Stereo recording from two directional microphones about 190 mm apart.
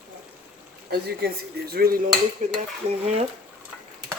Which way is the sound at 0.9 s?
55° right (ahead or behind).